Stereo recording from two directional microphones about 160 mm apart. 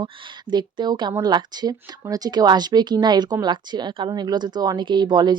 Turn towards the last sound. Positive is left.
turn(degrees=-25)  # may be behind; listen again after turning